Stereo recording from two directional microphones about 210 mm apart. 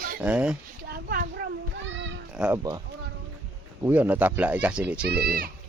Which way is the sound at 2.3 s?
5° right (ahead or behind).